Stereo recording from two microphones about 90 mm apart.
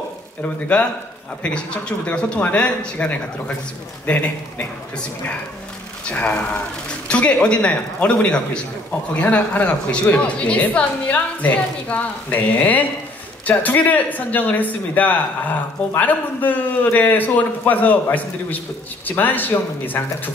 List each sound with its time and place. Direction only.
1.4 s a woman's voice: 10° left (ahead or behind)
6.0 s a woman's voice: 15° left (ahead or behind)